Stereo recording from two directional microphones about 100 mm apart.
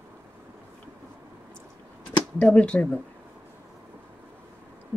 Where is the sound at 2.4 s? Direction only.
15° left (ahead or behind).